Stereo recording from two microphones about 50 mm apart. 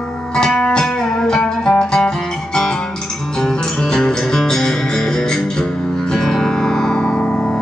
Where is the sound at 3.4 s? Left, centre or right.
Centre.